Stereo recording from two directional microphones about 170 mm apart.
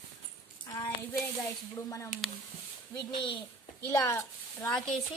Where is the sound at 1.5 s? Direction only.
20° left (ahead or behind).